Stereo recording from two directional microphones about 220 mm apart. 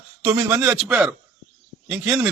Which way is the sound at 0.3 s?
10° right (ahead or behind).